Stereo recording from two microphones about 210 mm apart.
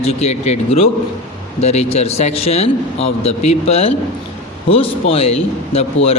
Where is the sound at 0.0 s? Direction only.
30° left (ahead or behind).